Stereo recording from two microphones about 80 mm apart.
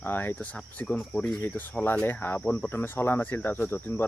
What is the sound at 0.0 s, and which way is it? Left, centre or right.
Speech, left.